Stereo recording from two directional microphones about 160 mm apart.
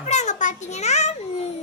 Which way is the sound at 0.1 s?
50° left (ahead or behind).